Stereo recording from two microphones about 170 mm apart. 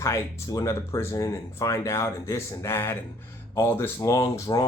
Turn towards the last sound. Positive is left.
turn(degrees=20)  # may be behind; listen again after turning